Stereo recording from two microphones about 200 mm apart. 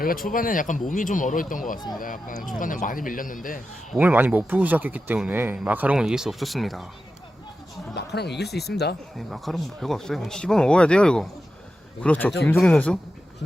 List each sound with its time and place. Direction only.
0.0 s speech: 45° left (ahead or behind)
3.9 s speech: 10° right (ahead or behind)
7.9 s speech: 55° left (ahead or behind)
9.1 s speech: centre (ahead or behind)